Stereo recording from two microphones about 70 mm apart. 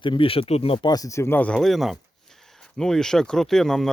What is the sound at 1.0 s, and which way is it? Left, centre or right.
Speech, left.